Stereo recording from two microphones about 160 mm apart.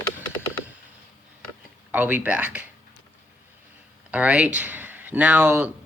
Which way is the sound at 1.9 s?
10° right (ahead or behind).